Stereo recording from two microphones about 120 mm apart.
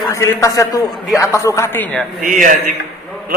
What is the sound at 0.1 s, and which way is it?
A man's voice, 25° left (ahead or behind).